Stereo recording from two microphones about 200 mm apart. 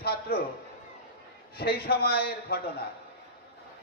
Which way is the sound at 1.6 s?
50° left (ahead or behind).